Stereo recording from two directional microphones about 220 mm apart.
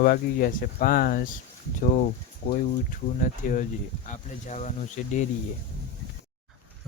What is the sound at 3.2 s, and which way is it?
Speech, 35° left (ahead or behind).